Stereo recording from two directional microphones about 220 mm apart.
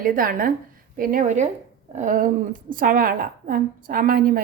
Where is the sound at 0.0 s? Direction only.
40° right (ahead or behind).